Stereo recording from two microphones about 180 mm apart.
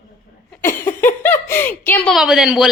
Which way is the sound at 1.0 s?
10° left (ahead or behind).